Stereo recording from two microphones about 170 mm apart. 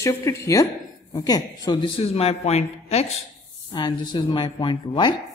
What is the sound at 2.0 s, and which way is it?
Speech, 35° left (ahead or behind).